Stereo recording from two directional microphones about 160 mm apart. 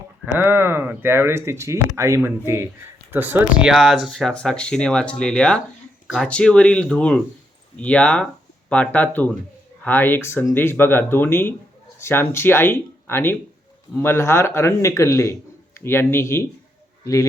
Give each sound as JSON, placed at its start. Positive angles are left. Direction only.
{"t": 0.3, "sound": "a man's voice", "side_deg": -15}